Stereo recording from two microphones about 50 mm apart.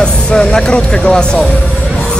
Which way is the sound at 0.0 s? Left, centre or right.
Centre.